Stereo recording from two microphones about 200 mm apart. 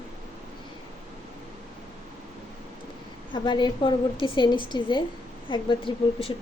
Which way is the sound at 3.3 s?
20° left (ahead or behind).